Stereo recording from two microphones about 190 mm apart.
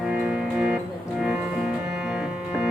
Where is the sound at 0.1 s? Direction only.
5° right (ahead or behind).